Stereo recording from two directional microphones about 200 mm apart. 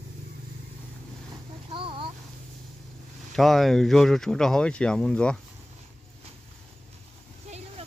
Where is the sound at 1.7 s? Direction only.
25° right (ahead or behind).